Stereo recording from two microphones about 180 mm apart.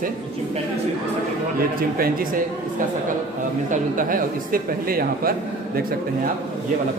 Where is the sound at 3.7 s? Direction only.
50° right (ahead or behind).